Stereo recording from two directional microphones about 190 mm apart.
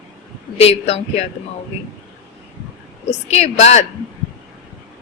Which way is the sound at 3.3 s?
35° left (ahead or behind).